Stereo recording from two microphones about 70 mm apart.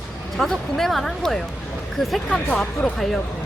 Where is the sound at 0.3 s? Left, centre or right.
Centre.